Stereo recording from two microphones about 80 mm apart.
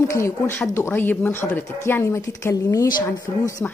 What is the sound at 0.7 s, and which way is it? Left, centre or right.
Speech, left.